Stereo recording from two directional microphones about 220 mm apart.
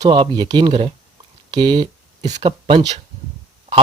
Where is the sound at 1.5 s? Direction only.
20° right (ahead or behind).